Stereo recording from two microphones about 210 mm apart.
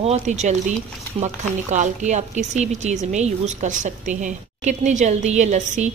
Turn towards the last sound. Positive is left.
turn(degrees=-35)  # may be behind; listen again after turning